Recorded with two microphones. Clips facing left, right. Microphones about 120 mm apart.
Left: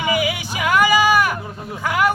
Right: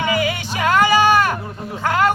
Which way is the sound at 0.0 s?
10° left (ahead or behind).